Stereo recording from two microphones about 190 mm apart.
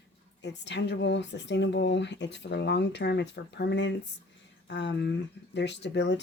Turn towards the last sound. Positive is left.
turn(degrees=65)  # may be behind; listen again after turning